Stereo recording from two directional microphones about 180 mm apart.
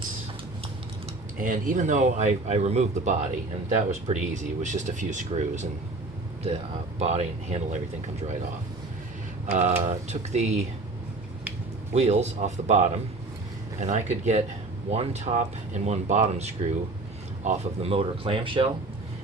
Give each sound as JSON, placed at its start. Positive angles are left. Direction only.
{"t": 1.4, "sound": "speech", "side_deg": -45}
{"t": 7.0, "sound": "speech", "side_deg": -35}
{"t": 9.5, "sound": "speech", "side_deg": -40}
{"t": 11.9, "sound": "speech", "side_deg": -35}